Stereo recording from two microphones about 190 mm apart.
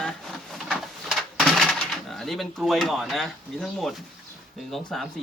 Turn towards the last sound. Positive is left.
turn(degrees=0)  # may be behind; listen again after turning